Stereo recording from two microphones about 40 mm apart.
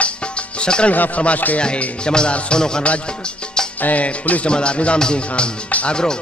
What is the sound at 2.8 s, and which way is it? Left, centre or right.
Music, left.